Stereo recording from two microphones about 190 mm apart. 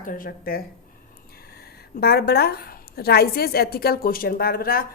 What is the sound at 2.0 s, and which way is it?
A woman's voice, 55° left (ahead or behind).